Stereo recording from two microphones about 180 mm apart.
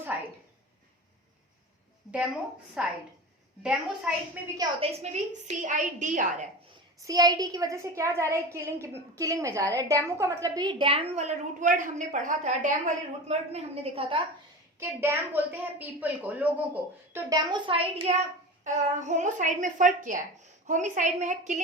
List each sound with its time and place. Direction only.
0.0 s a sound: 10° right (ahead or behind)
2.8 s a woman's voice: 5° right (ahead or behind)
4.8 s a woman's voice: 40° right (ahead or behind)
7.1 s a woman's voice: 20° right (ahead or behind)
14.8 s a woman's voice: 15° right (ahead or behind); by 21.6 s 40° right (ahead or behind)